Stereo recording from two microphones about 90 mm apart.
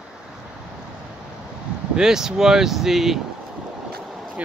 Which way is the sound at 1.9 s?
5° right (ahead or behind).